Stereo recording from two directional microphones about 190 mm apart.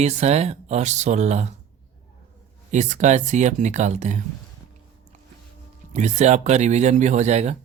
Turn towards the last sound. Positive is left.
turn(degrees=-35)  # may be behind; listen again after turning